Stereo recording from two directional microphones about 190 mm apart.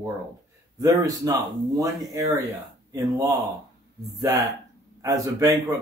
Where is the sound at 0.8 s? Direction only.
15° right (ahead or behind).